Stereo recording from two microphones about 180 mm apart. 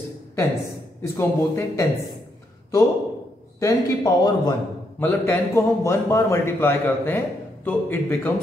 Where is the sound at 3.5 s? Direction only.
20° left (ahead or behind).